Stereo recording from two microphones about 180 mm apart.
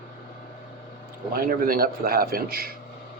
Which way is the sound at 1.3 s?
55° right (ahead or behind).